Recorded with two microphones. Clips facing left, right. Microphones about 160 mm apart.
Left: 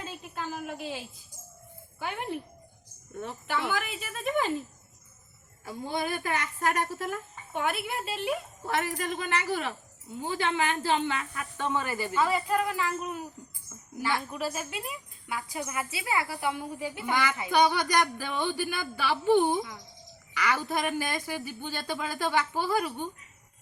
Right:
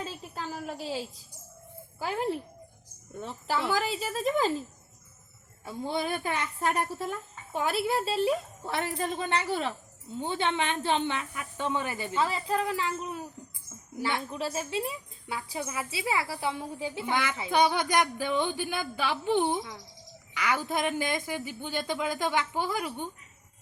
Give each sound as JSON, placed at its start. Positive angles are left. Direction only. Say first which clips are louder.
{"t": 0.7, "sound": "a sound", "louder": "right 2 dB", "side_deg": -35}
{"t": 2.0, "sound": "speech", "louder": "right 4 dB", "side_deg": -35}
{"t": 5.9, "sound": "a woman's voice", "louder": "even", "side_deg": -25}
{"t": 14.3, "sound": "a woman's voice", "louder": "right 2 dB", "side_deg": -25}